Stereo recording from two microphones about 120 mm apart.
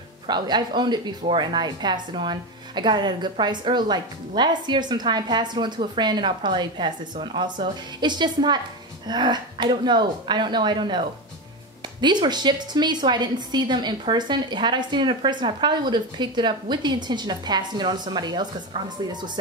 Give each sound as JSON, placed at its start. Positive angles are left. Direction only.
{"t": 0.3, "sound": "a woman's voice", "side_deg": -40}